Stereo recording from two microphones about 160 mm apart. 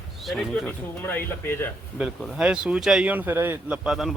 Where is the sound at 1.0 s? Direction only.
10° left (ahead or behind).